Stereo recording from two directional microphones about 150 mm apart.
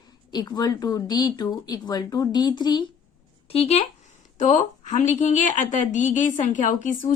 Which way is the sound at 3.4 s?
40° left (ahead or behind).